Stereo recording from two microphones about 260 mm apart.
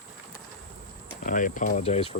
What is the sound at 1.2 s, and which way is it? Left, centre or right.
Speech, left.